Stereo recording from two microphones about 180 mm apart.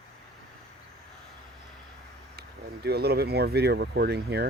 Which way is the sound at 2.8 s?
65° right (ahead or behind).